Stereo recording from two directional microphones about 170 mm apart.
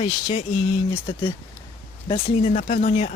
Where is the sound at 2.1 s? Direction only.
40° left (ahead or behind).